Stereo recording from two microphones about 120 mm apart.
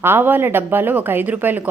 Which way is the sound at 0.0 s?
20° right (ahead or behind).